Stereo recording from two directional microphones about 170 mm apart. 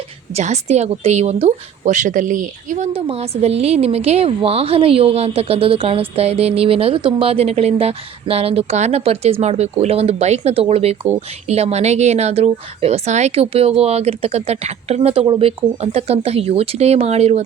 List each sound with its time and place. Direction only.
0.3 s speech: 40° right (ahead or behind)
3.1 s a woman's voice: 35° right (ahead or behind)